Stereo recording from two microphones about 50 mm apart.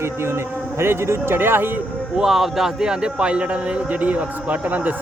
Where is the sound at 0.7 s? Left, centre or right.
Right.